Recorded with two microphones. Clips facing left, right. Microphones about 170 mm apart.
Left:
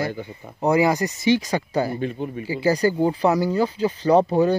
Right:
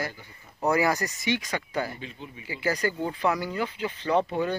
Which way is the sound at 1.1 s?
35° left (ahead or behind).